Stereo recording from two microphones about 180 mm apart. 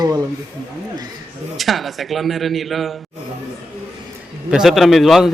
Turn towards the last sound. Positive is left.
turn(degrees=0)  # may be behind; listen again after turning